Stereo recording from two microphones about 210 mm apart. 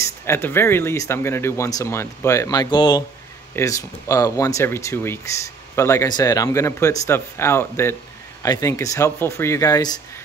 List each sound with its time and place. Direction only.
0.0 s speech: 10° left (ahead or behind)